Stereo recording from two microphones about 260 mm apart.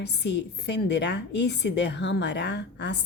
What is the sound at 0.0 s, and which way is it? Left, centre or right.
A woman's voice, left.